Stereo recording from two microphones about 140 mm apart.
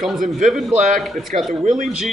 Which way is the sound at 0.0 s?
Centre (ahead or behind).